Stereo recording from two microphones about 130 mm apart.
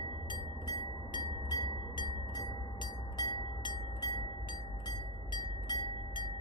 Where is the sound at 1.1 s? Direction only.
30° left (ahead or behind).